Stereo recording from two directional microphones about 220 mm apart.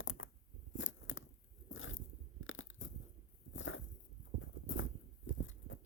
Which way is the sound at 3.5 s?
60° left (ahead or behind).